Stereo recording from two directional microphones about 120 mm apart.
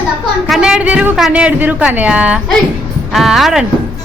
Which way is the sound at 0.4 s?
5° right (ahead or behind).